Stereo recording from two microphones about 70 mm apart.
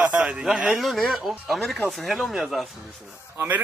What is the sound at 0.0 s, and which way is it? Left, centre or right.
Speech, centre.